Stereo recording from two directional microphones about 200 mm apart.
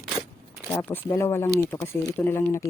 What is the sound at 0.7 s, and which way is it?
Speech, 10° left (ahead or behind).